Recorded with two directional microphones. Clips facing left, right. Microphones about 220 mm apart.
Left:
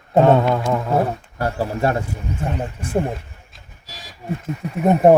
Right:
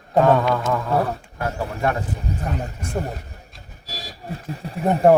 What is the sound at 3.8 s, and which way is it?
Vehicle, 35° right (ahead or behind).